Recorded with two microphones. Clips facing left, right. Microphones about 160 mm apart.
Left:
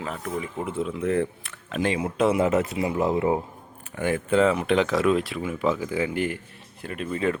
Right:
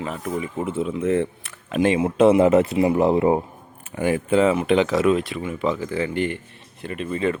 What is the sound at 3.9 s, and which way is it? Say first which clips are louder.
Speech: right 3 dB; 10° right (ahead or behind).